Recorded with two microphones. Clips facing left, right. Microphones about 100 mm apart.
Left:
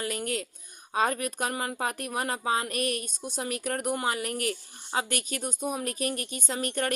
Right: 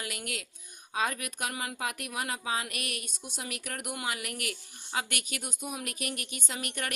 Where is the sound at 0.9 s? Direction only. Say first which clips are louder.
Left 5 dB; 40° left (ahead or behind).